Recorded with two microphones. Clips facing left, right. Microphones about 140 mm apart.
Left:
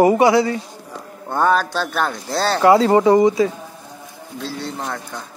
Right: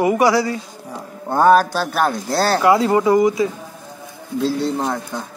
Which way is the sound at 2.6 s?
30° left (ahead or behind).